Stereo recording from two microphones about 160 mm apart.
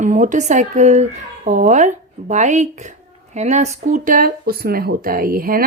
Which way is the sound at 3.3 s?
45° right (ahead or behind).